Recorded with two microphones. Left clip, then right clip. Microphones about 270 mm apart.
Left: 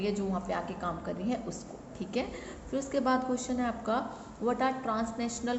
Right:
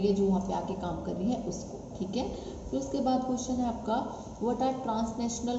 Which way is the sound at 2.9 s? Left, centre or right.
Left.